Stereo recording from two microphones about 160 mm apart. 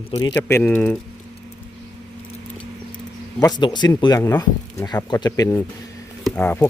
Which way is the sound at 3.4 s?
25° left (ahead or behind).